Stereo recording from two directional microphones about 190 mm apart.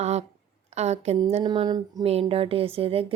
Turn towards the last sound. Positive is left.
turn(degrees=-30)  # may be behind; listen again after turning